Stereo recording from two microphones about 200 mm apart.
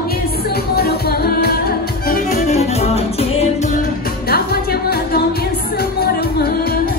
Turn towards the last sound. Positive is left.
turn(degrees=50)  # may be behind; listen again after turning